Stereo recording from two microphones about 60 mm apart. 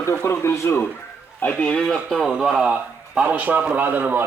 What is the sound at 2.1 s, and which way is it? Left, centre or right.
Speech, centre.